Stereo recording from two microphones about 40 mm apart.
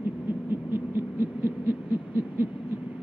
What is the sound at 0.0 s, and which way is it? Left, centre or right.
Owl, right.